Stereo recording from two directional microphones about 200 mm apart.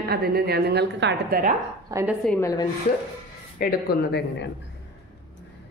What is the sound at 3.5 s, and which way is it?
Speech, 50° left (ahead or behind).